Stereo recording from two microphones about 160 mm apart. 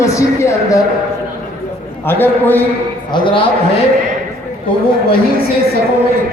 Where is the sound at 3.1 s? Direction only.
30° left (ahead or behind).